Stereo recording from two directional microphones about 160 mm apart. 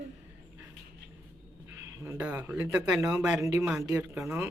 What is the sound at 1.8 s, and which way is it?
Speech, 15° right (ahead or behind).